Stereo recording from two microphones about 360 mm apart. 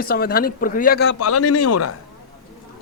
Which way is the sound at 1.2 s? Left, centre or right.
Left.